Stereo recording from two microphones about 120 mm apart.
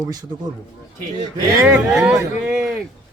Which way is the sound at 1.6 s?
5° right (ahead or behind).